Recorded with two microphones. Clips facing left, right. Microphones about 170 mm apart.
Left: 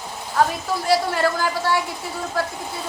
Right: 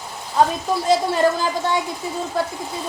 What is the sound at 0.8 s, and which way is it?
Speech, 20° right (ahead or behind).